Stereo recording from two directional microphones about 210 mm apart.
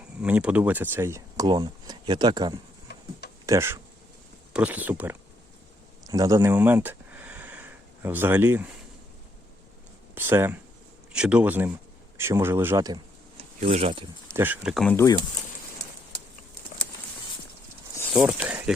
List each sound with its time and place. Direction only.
0.2 s speech: 5° right (ahead or behind)
6.1 s a sound: 15° right (ahead or behind)
10.2 s speech: 10° right (ahead or behind)
13.3 s a sound: 30° right (ahead or behind)
14.3 s speech: 10° right (ahead or behind)
14.9 s speech: 15° left (ahead or behind)
18.1 s speech: 10° right (ahead or behind)